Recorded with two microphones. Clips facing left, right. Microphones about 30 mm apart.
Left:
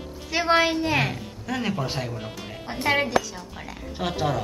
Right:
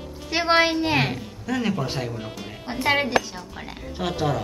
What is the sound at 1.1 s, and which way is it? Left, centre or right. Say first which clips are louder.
A woman's voice: right 3 dB; centre.